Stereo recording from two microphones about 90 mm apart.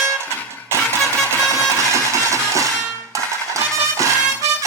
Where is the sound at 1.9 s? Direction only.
35° right (ahead or behind).